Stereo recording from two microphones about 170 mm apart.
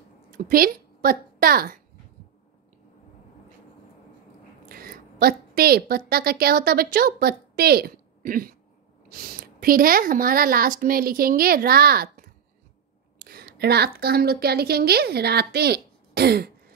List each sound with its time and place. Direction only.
0.4 s a woman's voice: 60° right (ahead or behind)
4.6 s a sound: 60° right (ahead or behind)
6.4 s a woman's voice: 65° right (ahead or behind)